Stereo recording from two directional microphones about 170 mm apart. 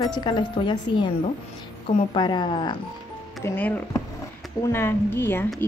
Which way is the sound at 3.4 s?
10° left (ahead or behind).